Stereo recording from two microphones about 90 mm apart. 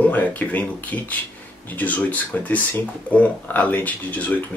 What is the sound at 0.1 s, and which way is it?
Speech, 20° left (ahead or behind).